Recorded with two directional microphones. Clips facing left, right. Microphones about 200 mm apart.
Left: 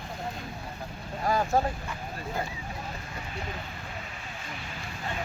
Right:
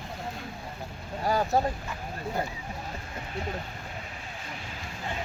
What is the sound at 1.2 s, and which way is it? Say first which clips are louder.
Vehicle: even; 35° right (ahead or behind).